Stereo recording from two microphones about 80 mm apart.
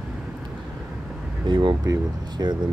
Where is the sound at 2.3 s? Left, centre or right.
Right.